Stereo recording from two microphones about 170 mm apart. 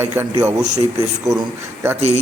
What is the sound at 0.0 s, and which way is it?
A man's voice, 15° right (ahead or behind).